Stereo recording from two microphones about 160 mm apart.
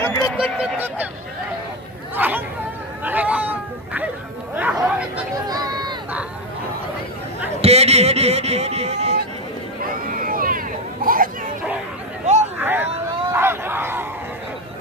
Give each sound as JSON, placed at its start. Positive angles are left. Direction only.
{"t": 0.0, "sound": "speech", "side_deg": 20}
{"t": 0.3, "sound": "honk", "side_deg": -5}
{"t": 2.1, "sound": "speech", "side_deg": -10}
{"t": 3.0, "sound": "a sound", "side_deg": -10}
{"t": 4.5, "sound": "chatter", "side_deg": -10}
{"t": 5.5, "sound": "run", "side_deg": -25}
{"t": 7.6, "sound": "speech", "side_deg": -40}
{"t": 9.8, "sound": "a sound", "side_deg": -60}
{"t": 12.5, "sound": "vehicle", "side_deg": -15}
{"t": 13.3, "sound": "a sound", "side_deg": -15}